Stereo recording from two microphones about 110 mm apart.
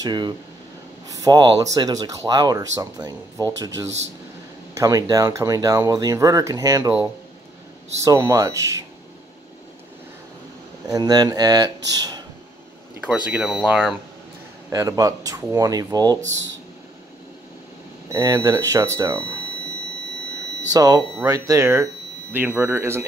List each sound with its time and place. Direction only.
0.0 s speech: 40° right (ahead or behind)
8.3 s speech: 30° right (ahead or behind)
10.9 s speech: 40° right (ahead or behind)
13.0 s speech: 10° right (ahead or behind)
14.7 s speech: 30° right (ahead or behind)
18.3 s speech: 30° right (ahead or behind)
20.7 s speech: 35° right (ahead or behind)
22.3 s speech: 15° right (ahead or behind)